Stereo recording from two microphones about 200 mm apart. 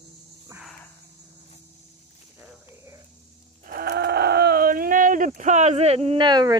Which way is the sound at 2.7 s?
15° right (ahead or behind).